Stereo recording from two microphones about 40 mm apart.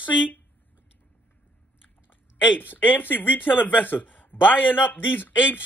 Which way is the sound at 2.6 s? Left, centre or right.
Left.